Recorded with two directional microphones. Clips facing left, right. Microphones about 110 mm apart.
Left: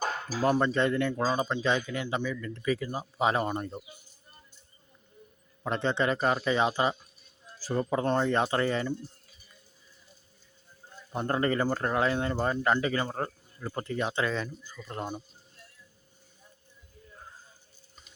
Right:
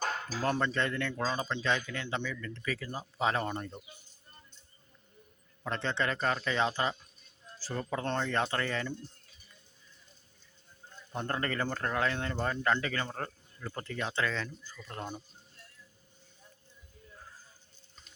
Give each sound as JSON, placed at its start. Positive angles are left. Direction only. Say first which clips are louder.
{"t": 0.0, "sound": "speech", "louder": "left 5 dB", "side_deg": 5}
{"t": 5.6, "sound": "a man's voice", "louder": "left 5 dB", "side_deg": 15}
{"t": 10.8, "sound": "speech", "louder": "left 5 dB", "side_deg": 10}